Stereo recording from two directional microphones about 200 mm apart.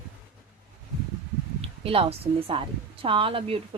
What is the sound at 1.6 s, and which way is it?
A woman's voice, 30° right (ahead or behind).